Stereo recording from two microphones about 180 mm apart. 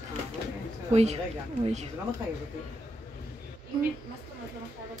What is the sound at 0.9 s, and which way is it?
Speech, 40° right (ahead or behind).